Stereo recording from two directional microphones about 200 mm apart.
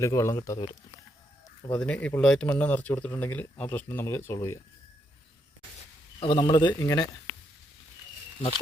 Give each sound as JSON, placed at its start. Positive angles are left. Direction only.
{"t": 0.0, "sound": "speech", "side_deg": 15}
{"t": 1.7, "sound": "speech", "side_deg": 5}
{"t": 6.1, "sound": "speech", "side_deg": 25}